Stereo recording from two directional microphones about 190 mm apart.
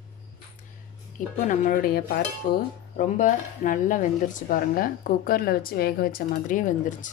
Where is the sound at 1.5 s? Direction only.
45° left (ahead or behind).